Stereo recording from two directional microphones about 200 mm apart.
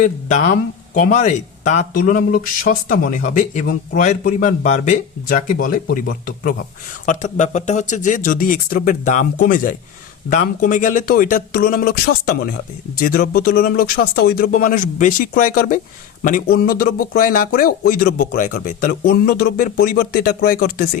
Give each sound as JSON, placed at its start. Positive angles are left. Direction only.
{"t": 0.0, "sound": "speech", "side_deg": 40}